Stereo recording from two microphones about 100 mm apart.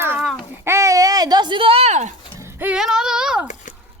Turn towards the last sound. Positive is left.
turn(degrees=-10)  # may be behind; listen again after turning